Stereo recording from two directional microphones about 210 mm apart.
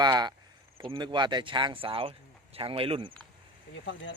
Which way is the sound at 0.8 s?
25° right (ahead or behind).